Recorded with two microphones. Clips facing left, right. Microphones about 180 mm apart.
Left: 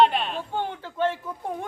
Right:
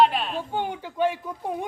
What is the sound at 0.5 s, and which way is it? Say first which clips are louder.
Speech: right 1 dB; 15° right (ahead or behind).